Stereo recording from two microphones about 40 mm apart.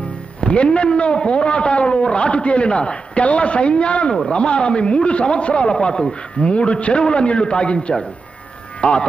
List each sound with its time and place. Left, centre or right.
0.4 s a man's voice: left